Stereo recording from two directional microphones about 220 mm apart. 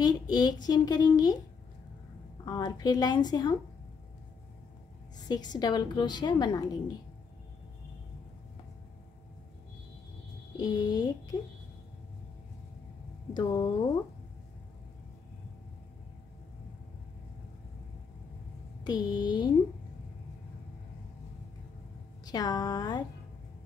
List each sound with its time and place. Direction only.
0.0 s a child's voice: 20° left (ahead or behind)
2.4 s a woman's voice: 20° left (ahead or behind)
5.3 s a woman's voice: 20° left (ahead or behind)
10.6 s a child's voice: 20° left (ahead or behind)
13.3 s a child's voice: 15° left (ahead or behind)
18.9 s a woman's voice: 20° left (ahead or behind)
22.2 s a child's voice: 15° left (ahead or behind)